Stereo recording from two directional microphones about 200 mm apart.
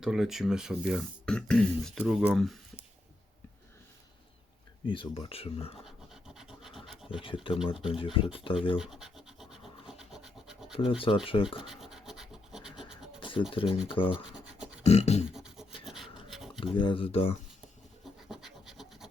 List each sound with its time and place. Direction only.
0.0 s speech: 5° right (ahead or behind)
4.9 s speech: 25° left (ahead or behind)
5.8 s scratch: centre (ahead or behind)
7.2 s speech: 25° left (ahead or behind)
8.8 s scratch: centre (ahead or behind)
10.8 s speech: 25° left (ahead or behind)
11.6 s scratch: centre (ahead or behind)
13.1 s scratch: 25° left (ahead or behind)
13.5 s speech: 25° left (ahead or behind)
14.3 s a sound: 5° right (ahead or behind)
14.8 s beatboxing: 35° left (ahead or behind)
15.3 s rub: centre (ahead or behind)
16.7 s speech: 25° left (ahead or behind)
18.3 s scratch: centre (ahead or behind)